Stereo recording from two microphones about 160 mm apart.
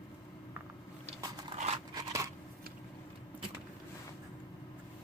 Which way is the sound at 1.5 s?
40° right (ahead or behind).